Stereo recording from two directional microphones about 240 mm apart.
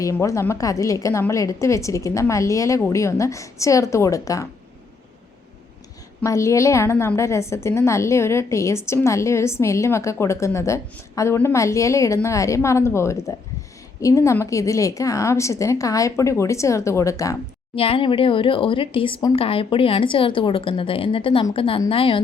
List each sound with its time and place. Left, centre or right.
0.0 s a woman's voice: centre
6.2 s a woman's voice: centre